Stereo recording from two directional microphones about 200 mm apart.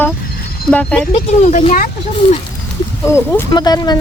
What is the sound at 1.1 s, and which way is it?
Speech, 35° left (ahead or behind).